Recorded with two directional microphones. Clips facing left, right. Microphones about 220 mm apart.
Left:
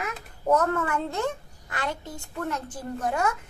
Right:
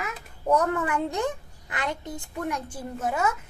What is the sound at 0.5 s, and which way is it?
A child's voice, 15° right (ahead or behind).